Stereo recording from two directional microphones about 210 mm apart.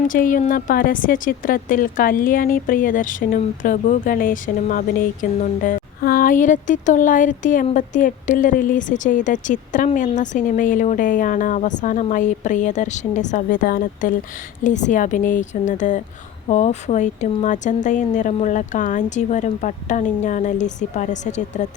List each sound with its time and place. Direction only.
0.1 s speech: 40° left (ahead or behind)